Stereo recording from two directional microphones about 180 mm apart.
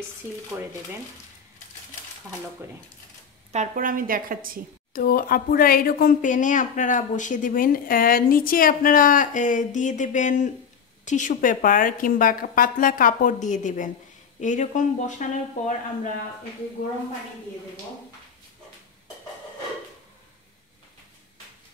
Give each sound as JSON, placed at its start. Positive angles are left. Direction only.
{"t": 3.5, "sound": "a woman's voice", "side_deg": -50}
{"t": 4.9, "sound": "a woman's voice", "side_deg": 55}